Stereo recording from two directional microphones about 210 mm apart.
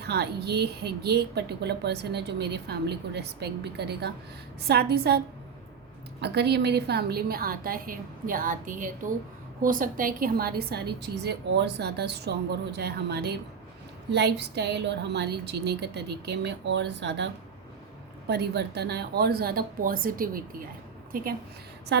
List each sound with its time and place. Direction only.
0.0 s speech: 50° right (ahead or behind)